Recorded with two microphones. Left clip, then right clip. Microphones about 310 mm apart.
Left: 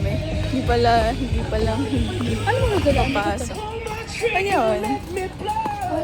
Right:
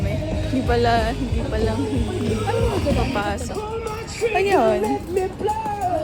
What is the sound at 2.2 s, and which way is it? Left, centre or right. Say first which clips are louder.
Speech: left 1 dB; right.